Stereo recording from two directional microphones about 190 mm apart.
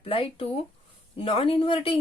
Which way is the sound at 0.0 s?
30° left (ahead or behind).